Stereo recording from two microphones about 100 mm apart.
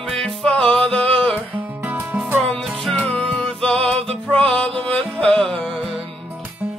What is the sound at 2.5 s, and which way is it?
Music, centre (ahead or behind).